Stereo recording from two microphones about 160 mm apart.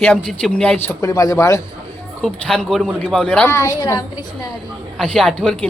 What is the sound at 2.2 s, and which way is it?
Speech, 5° left (ahead or behind).